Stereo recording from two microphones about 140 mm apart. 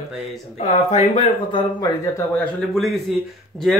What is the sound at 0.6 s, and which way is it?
Speech, 50° left (ahead or behind).